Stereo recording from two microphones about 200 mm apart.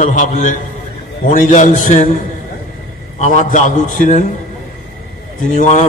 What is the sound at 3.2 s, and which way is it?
A man's voice, 35° left (ahead or behind).